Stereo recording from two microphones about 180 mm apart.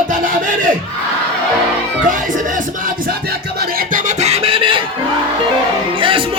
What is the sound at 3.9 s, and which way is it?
Music, 40° right (ahead or behind).